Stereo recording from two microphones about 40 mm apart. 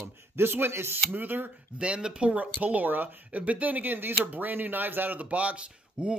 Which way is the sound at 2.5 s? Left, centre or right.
Right.